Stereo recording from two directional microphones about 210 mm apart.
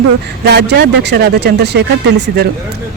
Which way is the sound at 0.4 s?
55° right (ahead or behind).